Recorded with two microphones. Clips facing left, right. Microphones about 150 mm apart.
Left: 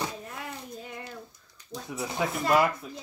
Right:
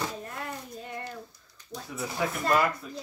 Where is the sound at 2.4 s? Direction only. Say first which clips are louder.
Left 2 dB; 10° left (ahead or behind).